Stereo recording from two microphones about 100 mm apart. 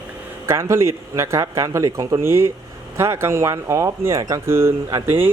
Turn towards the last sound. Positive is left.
turn(degrees=-25)  # may be behind; listen again after turning